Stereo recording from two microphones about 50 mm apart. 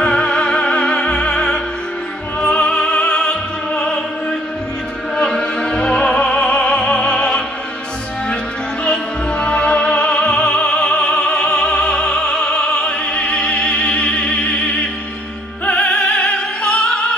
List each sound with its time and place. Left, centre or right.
0.0 s music: centre
3.7 s opera: centre
8.8 s opera: centre
15.6 s music: left